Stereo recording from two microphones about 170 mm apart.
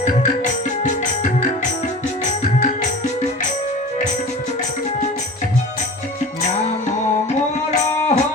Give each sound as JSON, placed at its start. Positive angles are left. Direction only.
{"t": 0.0, "sound": "music", "side_deg": 45}
{"t": 7.7, "sound": "music", "side_deg": 40}